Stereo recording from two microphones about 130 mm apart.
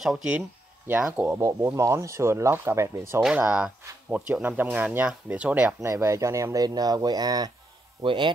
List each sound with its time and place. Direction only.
0.0 s speech: 5° right (ahead or behind)
1.4 s speech: 25° right (ahead or behind)
3.2 s speech: 5° right (ahead or behind)
5.8 s speech: 20° right (ahead or behind)
8.0 s speech: 40° right (ahead or behind)